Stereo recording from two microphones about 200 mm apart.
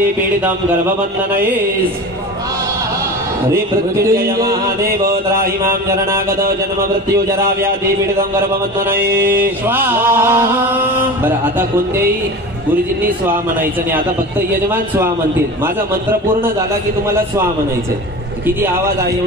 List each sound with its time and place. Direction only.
0.5 s speech: 10° right (ahead or behind)
4.5 s speech: 15° right (ahead or behind)
6.4 s speech: 50° right (ahead or behind)
7.2 s speech: 15° right (ahead or behind)
9.7 s speech: 10° right (ahead or behind)